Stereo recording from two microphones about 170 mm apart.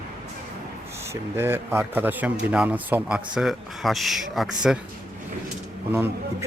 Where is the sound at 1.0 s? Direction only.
15° right (ahead or behind).